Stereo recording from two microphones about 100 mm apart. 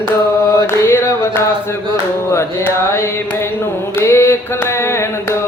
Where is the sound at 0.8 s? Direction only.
30° left (ahead or behind).